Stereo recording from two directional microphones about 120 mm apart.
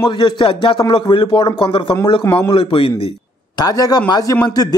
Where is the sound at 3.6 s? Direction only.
30° left (ahead or behind).